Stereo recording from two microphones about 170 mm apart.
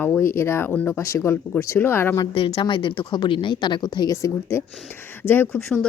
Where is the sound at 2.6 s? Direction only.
30° left (ahead or behind).